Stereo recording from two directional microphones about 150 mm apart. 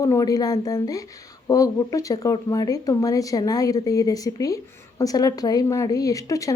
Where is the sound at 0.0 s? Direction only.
20° left (ahead or behind).